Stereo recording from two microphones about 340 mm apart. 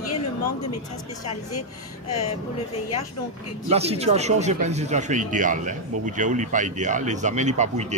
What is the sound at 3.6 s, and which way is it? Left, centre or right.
Speech, centre.